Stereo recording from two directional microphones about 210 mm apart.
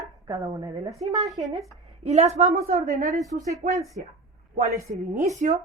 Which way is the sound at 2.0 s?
30° right (ahead or behind).